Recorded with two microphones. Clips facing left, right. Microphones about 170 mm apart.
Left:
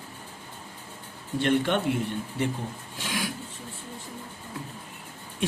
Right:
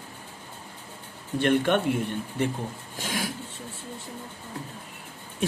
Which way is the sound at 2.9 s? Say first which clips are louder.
Right 1 dB; 45° right (ahead or behind).